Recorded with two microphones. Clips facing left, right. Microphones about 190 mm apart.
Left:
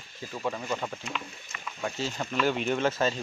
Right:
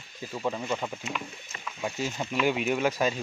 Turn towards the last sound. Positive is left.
turn(degrees=-10)  # may be behind; listen again after turning